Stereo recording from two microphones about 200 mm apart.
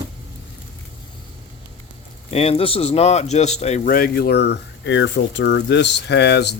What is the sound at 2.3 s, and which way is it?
Speech, 30° left (ahead or behind).